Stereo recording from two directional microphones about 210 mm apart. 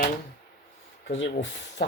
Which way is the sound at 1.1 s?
60° left (ahead or behind).